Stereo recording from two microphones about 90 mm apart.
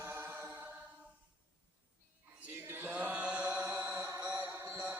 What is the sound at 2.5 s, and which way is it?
Chant, 25° right (ahead or behind).